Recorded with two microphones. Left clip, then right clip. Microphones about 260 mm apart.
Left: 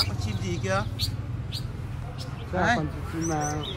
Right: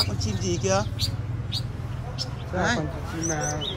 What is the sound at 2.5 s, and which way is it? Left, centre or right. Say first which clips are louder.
Speech: left 1 dB; centre.